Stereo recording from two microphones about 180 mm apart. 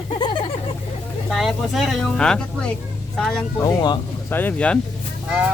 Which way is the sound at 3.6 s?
20° left (ahead or behind).